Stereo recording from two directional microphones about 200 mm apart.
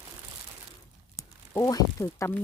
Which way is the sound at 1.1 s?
15° left (ahead or behind).